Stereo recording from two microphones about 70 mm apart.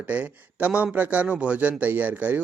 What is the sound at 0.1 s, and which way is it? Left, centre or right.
Speech, right.